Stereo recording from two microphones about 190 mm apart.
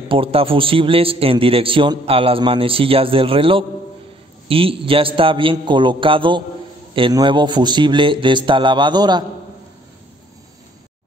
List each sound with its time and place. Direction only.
0.1 s a man's voice: 30° right (ahead or behind)